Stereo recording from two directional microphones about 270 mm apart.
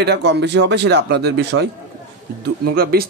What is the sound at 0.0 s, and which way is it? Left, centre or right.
Speech, right.